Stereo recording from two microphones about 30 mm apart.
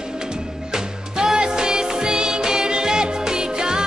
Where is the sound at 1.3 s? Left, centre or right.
Right.